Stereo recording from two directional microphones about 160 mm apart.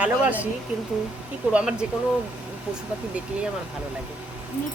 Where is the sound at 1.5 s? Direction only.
5° right (ahead or behind).